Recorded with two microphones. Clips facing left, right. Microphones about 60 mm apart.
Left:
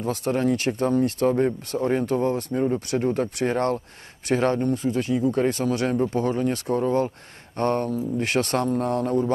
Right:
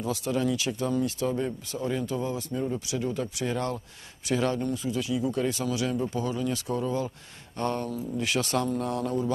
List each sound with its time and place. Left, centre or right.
0.0 s speech: left